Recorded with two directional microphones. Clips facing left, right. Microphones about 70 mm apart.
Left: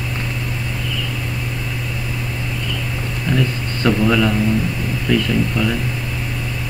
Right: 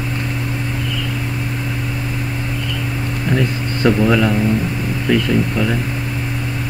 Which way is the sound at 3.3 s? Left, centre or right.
Right.